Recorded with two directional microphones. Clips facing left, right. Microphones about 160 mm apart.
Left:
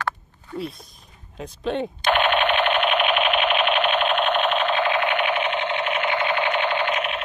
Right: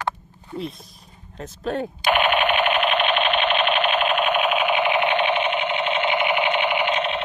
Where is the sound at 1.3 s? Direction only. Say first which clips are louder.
Left 1 dB; centre (ahead or behind).